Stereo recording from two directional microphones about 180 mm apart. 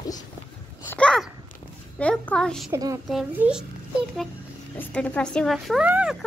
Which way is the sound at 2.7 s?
20° right (ahead or behind).